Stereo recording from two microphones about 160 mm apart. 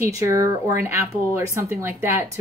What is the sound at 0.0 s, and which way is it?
A woman's voice, 20° right (ahead or behind).